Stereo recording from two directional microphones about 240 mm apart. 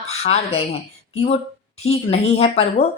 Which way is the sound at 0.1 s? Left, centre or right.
Left.